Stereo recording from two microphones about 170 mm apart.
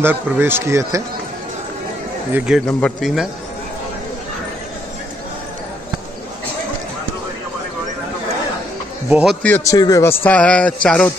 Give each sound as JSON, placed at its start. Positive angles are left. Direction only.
{"t": 0.0, "sound": "speech", "side_deg": -10}
{"t": 2.3, "sound": "speech", "side_deg": -5}
{"t": 9.1, "sound": "speech", "side_deg": -5}
{"t": 9.7, "sound": "a man's voice", "side_deg": 20}
{"t": 10.2, "sound": "speech", "side_deg": 10}